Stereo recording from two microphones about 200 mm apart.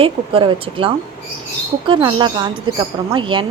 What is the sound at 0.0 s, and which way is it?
A woman's voice, 25° right (ahead or behind).